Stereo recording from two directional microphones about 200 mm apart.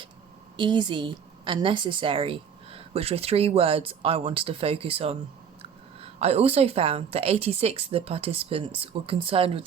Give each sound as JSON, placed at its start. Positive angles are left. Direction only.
{"t": 0.5, "sound": "a woman's voice", "side_deg": -25}